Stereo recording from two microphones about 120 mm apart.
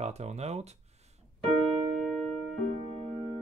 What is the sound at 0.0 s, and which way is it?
Speech, 65° right (ahead or behind).